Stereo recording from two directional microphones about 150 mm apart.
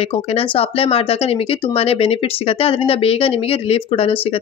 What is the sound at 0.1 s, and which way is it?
Speech, 40° left (ahead or behind).